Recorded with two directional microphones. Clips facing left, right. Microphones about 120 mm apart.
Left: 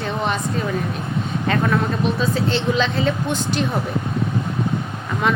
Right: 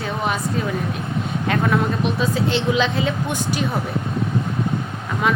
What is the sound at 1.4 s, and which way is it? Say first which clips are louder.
Speech: even; 5° right (ahead or behind).